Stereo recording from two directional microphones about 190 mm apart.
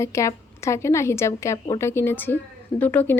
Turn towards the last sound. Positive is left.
turn(degrees=10)  # may be behind; listen again after turning